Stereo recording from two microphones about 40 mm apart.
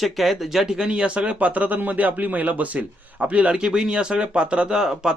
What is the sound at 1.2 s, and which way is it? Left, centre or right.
A man's voice, right.